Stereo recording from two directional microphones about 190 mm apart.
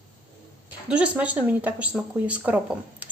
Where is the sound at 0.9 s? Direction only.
5° right (ahead or behind).